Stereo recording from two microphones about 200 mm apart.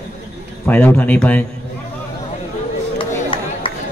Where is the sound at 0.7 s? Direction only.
10° left (ahead or behind).